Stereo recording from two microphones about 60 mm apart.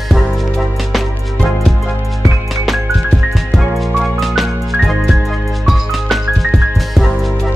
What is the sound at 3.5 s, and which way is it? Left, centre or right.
Music, centre.